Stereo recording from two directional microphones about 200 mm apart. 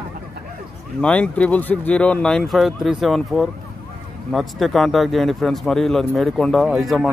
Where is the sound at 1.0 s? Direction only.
5° left (ahead or behind).